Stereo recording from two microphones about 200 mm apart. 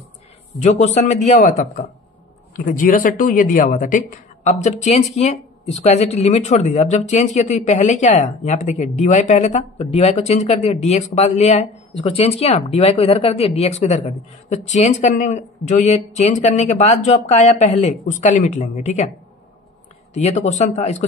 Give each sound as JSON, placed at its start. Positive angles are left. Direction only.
{"t": 0.6, "sound": "speech", "side_deg": 35}
{"t": 20.2, "sound": "speech", "side_deg": 35}